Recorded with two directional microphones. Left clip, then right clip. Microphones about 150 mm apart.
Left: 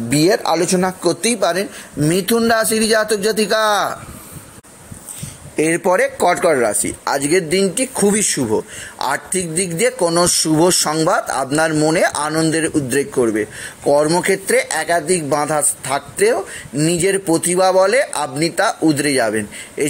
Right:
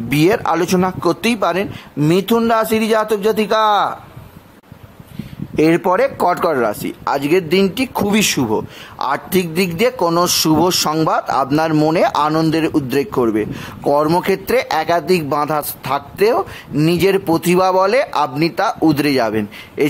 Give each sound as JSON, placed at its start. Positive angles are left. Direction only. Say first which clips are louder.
{"t": 0.1, "sound": "a woman's voice", "louder": "even", "side_deg": -20}
{"t": 1.4, "sound": "a man's voice", "louder": "even", "side_deg": 0}
{"t": 5.6, "sound": "a man's voice", "louder": "right 2 dB", "side_deg": -5}
{"t": 6.0, "sound": "a man's voice", "louder": "left 1 dB", "side_deg": -15}
{"t": 12.3, "sound": "speech", "louder": "right 2 dB", "side_deg": -25}